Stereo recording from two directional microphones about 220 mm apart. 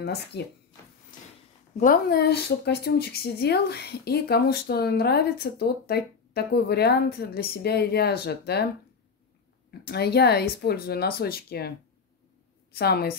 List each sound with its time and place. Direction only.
0.0 s a woman's voice: 50° left (ahead or behind)
1.1 s a sound: 35° left (ahead or behind)
1.8 s a woman's voice: 40° left (ahead or behind)
9.8 s a woman's voice: 45° left (ahead or behind)
12.7 s a woman's voice: 45° left (ahead or behind)